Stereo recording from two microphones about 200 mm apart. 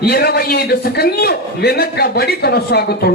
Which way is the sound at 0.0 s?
50° left (ahead or behind).